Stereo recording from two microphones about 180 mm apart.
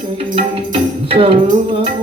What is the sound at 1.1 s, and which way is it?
Music, 30° right (ahead or behind).